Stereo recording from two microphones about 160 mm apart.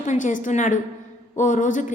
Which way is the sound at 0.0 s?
50° left (ahead or behind).